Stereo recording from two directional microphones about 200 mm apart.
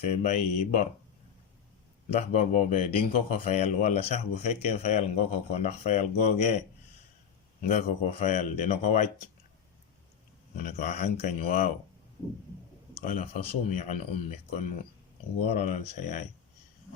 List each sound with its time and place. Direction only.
0.0 s speech: 35° left (ahead or behind)
2.1 s speech: 35° left (ahead or behind)
7.6 s speech: 35° left (ahead or behind)
10.6 s speech: 40° left (ahead or behind)
13.0 s a man's voice: 45° left (ahead or behind)